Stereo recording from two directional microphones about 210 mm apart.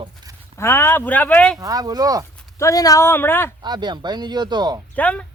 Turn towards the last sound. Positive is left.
turn(degrees=5)  # may be behind; listen again after turning